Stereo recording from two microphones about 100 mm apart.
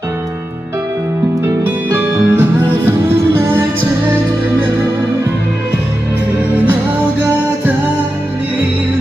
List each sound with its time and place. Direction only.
1.9 s music: 20° right (ahead or behind)